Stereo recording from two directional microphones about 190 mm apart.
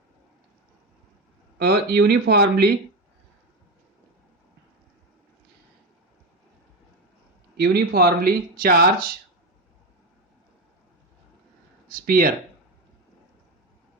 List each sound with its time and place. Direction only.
1.5 s speech: 55° right (ahead or behind)
7.5 s speech: 55° right (ahead or behind)
11.9 s speech: 50° right (ahead or behind)